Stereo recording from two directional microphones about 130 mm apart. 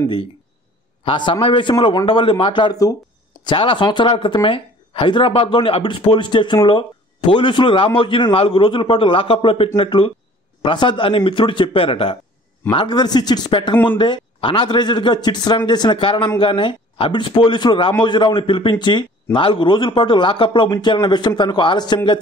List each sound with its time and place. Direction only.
1.0 s speech: 40° left (ahead or behind)
3.4 s a man's voice: 40° left (ahead or behind)